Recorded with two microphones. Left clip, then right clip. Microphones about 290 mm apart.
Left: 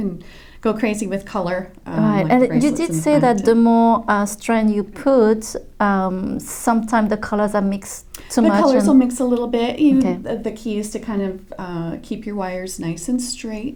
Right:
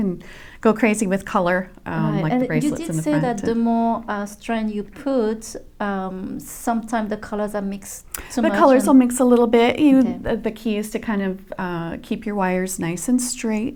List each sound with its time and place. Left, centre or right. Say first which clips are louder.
0.6 s speech: right 2 dB; right
2.0 s speech: left 7 dB; left
8.5 s speech: right 2 dB; right
10.2 s speech: right 1 dB; right